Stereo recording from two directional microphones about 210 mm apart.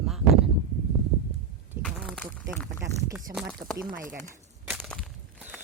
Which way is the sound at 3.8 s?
40° right (ahead or behind).